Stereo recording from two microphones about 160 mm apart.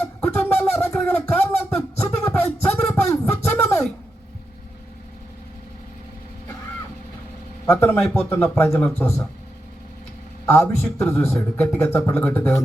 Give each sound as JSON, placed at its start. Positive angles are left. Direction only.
{"t": 0.3, "sound": "a sound", "side_deg": 15}
{"t": 7.7, "sound": "speech", "side_deg": 15}
{"t": 10.4, "sound": "speech", "side_deg": 15}